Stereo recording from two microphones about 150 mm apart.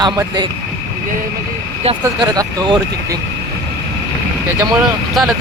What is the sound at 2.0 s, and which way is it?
Speech, 25° right (ahead or behind).